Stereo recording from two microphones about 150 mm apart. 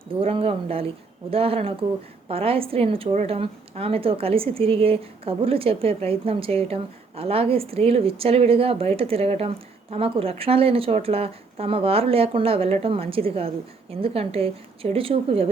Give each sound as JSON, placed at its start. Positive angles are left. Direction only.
{"t": 0.2, "sound": "a woman's voice", "side_deg": -40}